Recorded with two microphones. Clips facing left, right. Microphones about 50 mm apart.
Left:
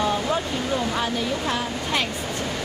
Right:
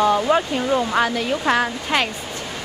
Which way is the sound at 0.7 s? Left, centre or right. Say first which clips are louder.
Right 6 dB; right.